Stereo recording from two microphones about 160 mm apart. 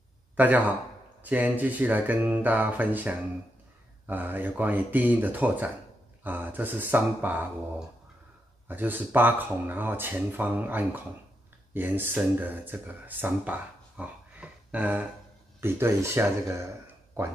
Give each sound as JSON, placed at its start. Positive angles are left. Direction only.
{"t": 0.4, "sound": "speech", "side_deg": -10}
{"t": 8.6, "sound": "speech", "side_deg": -10}